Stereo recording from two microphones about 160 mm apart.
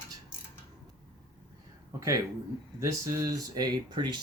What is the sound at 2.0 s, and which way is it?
Speech, 20° right (ahead or behind).